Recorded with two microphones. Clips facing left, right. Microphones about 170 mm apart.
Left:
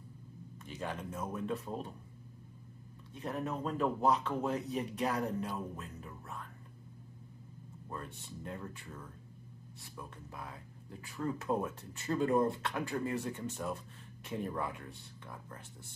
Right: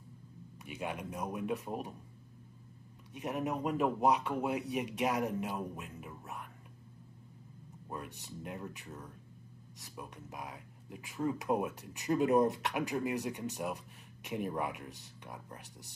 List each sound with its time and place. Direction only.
0.7 s speech: 10° right (ahead or behind)
3.1 s speech: 15° right (ahead or behind)
7.9 s speech: 15° right (ahead or behind)